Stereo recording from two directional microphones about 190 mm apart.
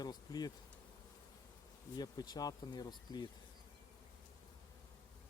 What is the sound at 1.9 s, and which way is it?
Speech, 20° left (ahead or behind).